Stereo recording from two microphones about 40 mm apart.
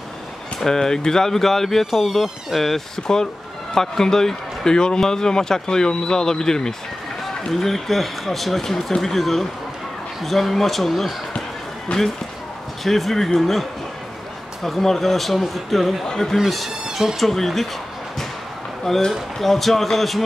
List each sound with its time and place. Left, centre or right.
0.6 s speech: centre
3.7 s speech: centre
11.9 s speech: left
12.8 s speech: centre
16.9 s speech: centre
17.2 s speech: centre
18.9 s speech: centre